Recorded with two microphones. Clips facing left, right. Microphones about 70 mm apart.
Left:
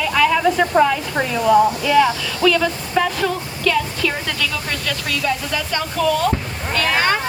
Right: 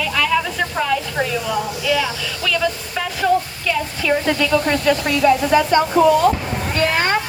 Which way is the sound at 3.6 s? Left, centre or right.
Centre.